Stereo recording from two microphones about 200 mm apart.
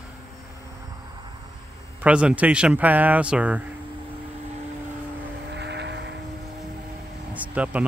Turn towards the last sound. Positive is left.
turn(degrees=-5)  # may be behind; listen again after turning